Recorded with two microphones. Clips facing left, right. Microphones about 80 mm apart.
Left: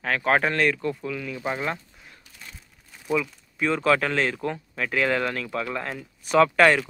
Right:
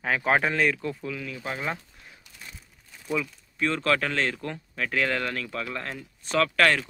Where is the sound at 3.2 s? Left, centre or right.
Centre.